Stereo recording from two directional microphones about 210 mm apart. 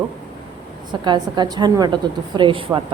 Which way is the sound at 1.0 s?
20° right (ahead or behind).